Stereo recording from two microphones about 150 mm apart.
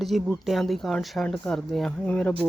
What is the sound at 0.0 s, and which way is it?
Speech, centre (ahead or behind).